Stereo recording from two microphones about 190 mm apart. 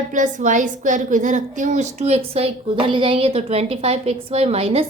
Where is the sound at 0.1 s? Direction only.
40° right (ahead or behind).